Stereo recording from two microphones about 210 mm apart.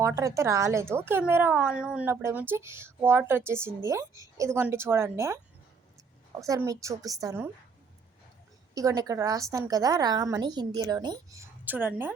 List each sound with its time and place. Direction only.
0.0 s speech: 15° right (ahead or behind)
6.4 s speech: 15° right (ahead or behind)
8.7 s speech: 15° right (ahead or behind)